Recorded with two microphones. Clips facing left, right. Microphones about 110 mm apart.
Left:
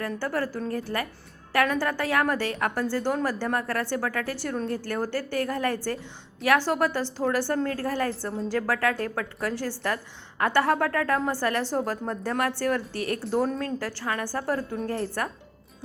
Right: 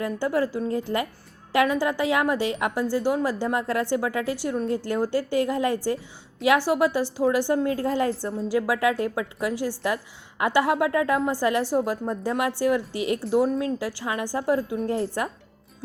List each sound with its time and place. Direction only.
0.0 s a woman's voice: 15° right (ahead or behind)